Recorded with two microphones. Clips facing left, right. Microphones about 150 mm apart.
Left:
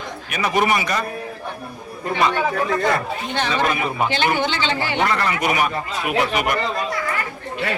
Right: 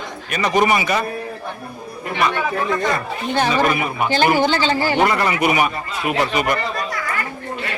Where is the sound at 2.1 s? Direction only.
25° left (ahead or behind).